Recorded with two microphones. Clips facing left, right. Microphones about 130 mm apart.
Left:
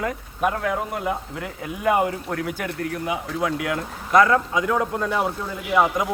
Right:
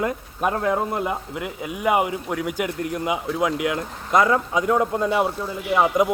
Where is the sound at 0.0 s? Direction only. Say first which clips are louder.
Even; 25° right (ahead or behind).